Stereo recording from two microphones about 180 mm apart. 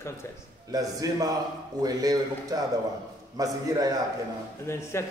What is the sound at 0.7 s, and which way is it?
A man's voice, 20° right (ahead or behind).